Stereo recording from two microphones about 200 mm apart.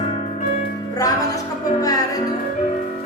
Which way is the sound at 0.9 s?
15° left (ahead or behind).